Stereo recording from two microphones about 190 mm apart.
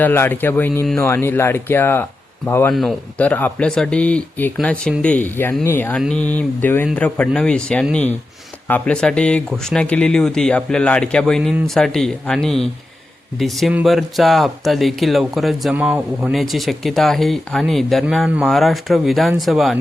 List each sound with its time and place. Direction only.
0.0 s speech: 10° left (ahead or behind)